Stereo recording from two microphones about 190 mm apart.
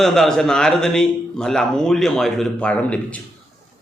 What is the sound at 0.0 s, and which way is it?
Speech, centre (ahead or behind).